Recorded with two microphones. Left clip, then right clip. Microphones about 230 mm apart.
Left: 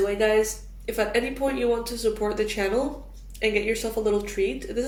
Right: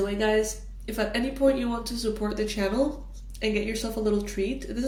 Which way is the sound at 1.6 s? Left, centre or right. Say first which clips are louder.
Left 6 dB; right.